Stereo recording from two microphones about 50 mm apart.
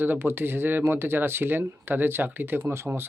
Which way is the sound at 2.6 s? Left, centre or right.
Right.